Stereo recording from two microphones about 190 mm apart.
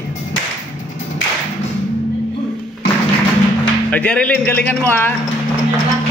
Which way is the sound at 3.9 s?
5° left (ahead or behind).